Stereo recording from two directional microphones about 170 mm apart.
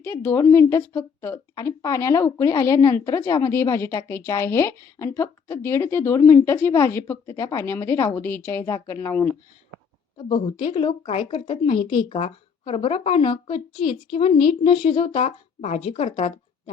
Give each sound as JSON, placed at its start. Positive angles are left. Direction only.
{"t": 0.0, "sound": "a woman's voice", "side_deg": 15}
{"t": 10.2, "sound": "a woman's voice", "side_deg": 30}